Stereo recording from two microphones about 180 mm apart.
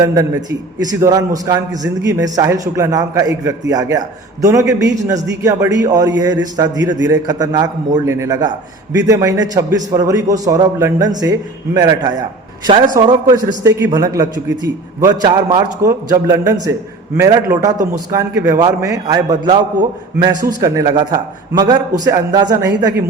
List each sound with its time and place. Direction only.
0.0 s a man's voice: 20° right (ahead or behind)
20.6 s a man's voice: 20° right (ahead or behind)